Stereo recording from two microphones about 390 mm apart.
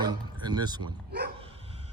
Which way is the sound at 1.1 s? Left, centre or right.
Right.